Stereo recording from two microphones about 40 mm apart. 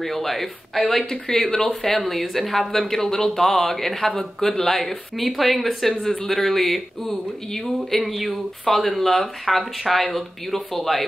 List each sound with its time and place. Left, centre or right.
0.0 s speech: centre
1.1 s speech: centre